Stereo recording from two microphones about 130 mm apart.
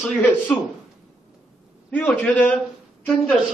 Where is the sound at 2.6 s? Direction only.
Centre (ahead or behind).